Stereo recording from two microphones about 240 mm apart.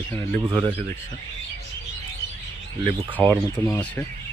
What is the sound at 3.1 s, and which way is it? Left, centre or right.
Speech, centre.